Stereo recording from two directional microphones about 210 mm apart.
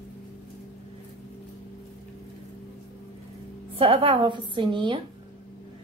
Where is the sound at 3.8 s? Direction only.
25° right (ahead or behind).